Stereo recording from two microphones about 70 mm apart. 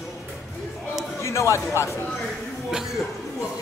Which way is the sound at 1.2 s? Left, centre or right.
Left.